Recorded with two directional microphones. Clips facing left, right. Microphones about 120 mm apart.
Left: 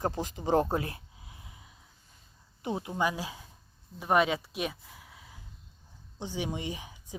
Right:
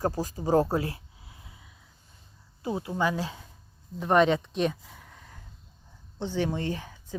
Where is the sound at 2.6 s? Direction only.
20° left (ahead or behind).